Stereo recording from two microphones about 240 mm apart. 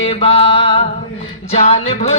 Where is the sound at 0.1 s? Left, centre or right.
Left.